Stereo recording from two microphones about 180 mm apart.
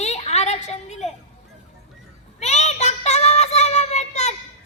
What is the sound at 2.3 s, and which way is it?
Child singing, 40° left (ahead or behind).